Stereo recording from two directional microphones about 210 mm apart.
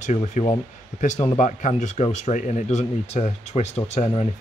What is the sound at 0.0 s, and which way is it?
Speech, 35° left (ahead or behind).